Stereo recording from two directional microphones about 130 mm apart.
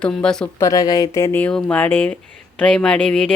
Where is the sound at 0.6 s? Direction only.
25° left (ahead or behind).